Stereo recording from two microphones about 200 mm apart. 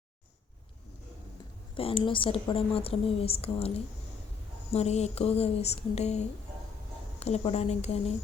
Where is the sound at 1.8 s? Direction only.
25° left (ahead or behind).